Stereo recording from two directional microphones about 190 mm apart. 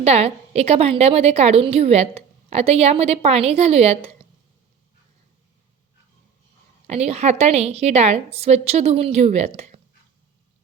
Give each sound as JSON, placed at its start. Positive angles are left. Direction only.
{"t": 0.0, "sound": "a woman's voice", "side_deg": -35}
{"t": 6.8, "sound": "a woman's voice", "side_deg": -35}